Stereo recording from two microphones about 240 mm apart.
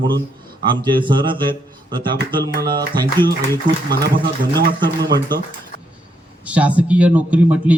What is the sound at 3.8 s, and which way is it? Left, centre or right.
Speech, right.